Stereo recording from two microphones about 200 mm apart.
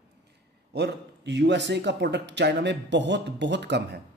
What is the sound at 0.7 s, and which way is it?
Speech, 60° right (ahead or behind).